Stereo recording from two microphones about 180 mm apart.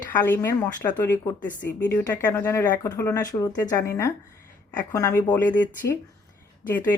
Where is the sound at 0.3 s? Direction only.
15° left (ahead or behind).